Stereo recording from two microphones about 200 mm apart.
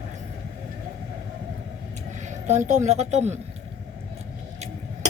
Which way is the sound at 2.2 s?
35° right (ahead or behind).